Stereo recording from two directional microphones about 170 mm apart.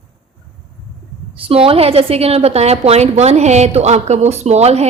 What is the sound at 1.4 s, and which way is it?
A woman's voice, 35° right (ahead or behind).